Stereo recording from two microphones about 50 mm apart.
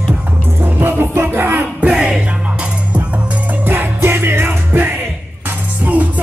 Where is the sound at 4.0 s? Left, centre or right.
Right.